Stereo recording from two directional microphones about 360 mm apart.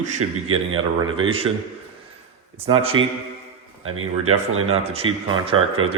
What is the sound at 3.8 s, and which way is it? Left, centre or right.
Speech, right.